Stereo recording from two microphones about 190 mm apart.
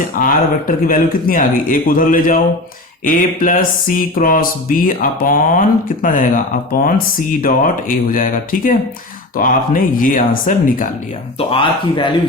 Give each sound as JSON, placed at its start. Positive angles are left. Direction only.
{"t": 0.2, "sound": "speech", "side_deg": 45}
{"t": 11.3, "sound": "speech", "side_deg": 30}